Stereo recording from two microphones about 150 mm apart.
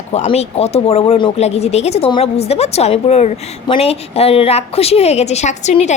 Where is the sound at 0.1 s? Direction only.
45° left (ahead or behind).